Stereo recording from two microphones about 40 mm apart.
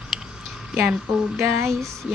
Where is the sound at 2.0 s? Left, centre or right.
Right.